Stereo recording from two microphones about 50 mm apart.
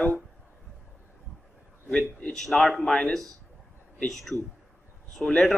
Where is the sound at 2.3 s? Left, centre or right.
Centre.